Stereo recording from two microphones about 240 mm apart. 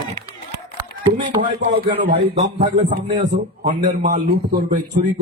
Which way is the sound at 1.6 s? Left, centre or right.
Right.